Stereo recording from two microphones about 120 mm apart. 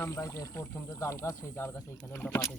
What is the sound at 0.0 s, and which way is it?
Speech, 25° left (ahead or behind).